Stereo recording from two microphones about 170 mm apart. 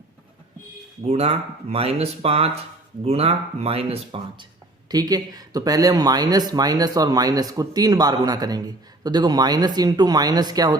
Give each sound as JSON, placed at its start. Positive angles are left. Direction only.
{"t": 1.0, "sound": "speech", "side_deg": -35}
{"t": 4.9, "sound": "speech", "side_deg": -20}